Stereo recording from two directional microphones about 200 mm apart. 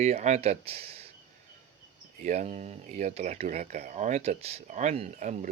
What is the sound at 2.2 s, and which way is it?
Speech, 35° right (ahead or behind).